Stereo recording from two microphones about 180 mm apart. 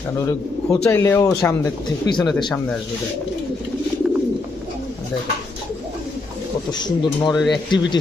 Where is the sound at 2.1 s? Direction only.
5° left (ahead or behind).